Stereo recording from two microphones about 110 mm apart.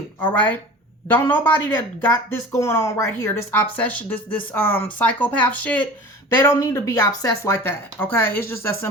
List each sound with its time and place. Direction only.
0.3 s speech: 15° left (ahead or behind)
6.3 s speech: 25° left (ahead or behind)